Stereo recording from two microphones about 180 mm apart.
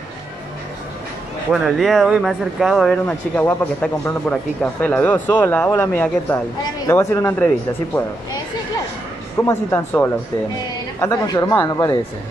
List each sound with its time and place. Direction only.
1.5 s speech: centre (ahead or behind)
9.4 s speech: 15° left (ahead or behind)